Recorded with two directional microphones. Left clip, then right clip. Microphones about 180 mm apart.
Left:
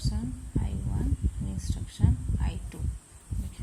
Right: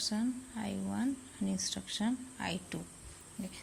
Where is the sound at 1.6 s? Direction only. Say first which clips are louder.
Right 1 dB; 25° right (ahead or behind).